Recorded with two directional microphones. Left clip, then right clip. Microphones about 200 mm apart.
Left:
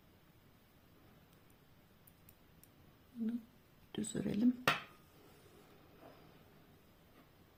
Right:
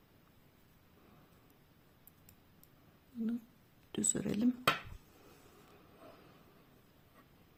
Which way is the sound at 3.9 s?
30° right (ahead or behind).